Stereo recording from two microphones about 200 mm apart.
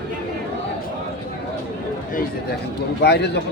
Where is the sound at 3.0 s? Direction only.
55° left (ahead or behind).